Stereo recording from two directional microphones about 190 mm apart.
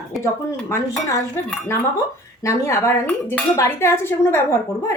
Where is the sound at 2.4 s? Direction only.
15° left (ahead or behind).